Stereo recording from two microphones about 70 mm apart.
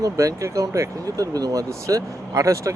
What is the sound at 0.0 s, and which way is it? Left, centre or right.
Speech, right.